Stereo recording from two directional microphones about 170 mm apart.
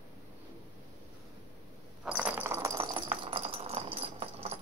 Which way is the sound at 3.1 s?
30° right (ahead or behind).